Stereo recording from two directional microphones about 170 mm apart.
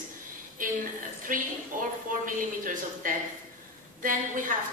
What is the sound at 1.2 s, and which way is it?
A woman's voice, 55° right (ahead or behind).